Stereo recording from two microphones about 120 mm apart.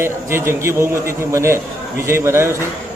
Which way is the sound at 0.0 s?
20° right (ahead or behind).